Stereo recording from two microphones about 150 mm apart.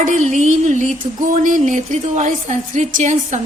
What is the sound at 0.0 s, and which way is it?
A woman's voice, 55° right (ahead or behind).